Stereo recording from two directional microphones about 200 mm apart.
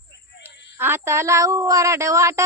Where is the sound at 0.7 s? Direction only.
10° right (ahead or behind).